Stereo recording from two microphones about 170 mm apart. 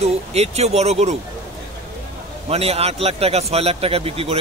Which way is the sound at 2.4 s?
35° right (ahead or behind).